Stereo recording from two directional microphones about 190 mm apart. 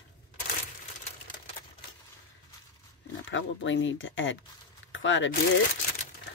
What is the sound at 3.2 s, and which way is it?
Speech, 85° left.